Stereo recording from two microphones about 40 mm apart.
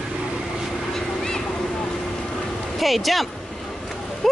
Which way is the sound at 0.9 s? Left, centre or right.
Centre.